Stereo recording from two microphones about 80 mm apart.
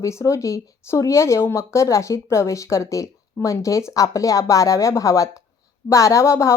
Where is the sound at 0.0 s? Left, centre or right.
Left.